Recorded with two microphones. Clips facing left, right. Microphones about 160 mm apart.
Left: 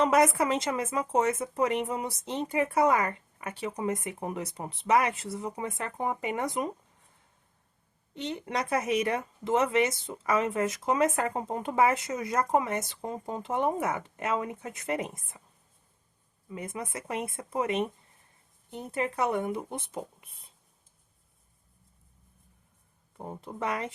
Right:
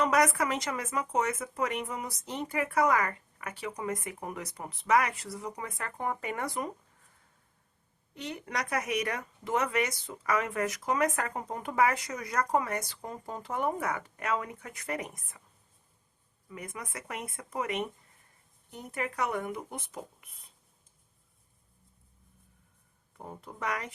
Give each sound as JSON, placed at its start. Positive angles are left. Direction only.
{"t": 0.0, "sound": "speech", "side_deg": 25}
{"t": 8.1, "sound": "speech", "side_deg": 25}
{"t": 16.5, "sound": "speech", "side_deg": 25}
{"t": 23.1, "sound": "speech", "side_deg": 25}